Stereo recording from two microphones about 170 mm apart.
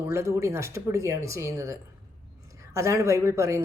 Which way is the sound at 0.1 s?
15° right (ahead or behind).